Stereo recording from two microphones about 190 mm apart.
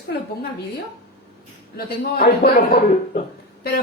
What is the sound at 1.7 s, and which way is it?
Speech, 55° left (ahead or behind).